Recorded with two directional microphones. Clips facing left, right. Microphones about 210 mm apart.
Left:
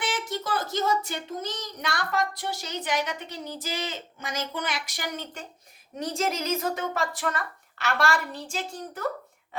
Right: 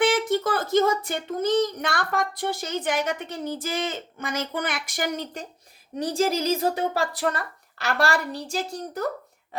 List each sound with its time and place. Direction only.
0.0 s speech: 55° right (ahead or behind); by 9.0 s 35° right (ahead or behind)